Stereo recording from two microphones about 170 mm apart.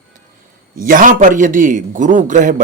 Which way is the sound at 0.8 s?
50° right (ahead or behind).